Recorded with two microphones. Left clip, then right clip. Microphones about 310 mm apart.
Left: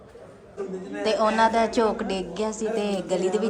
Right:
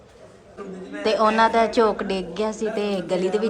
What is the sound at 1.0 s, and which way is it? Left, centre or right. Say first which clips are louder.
A woman's voice: right 3 dB; centre.